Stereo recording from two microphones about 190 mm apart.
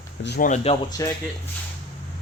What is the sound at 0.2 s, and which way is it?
Speech, 60° left (ahead or behind).